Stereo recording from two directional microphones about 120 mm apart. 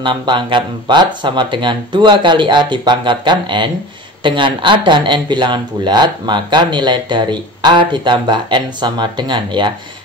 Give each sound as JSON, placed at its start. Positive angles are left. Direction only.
{"t": 0.0, "sound": "speech", "side_deg": -40}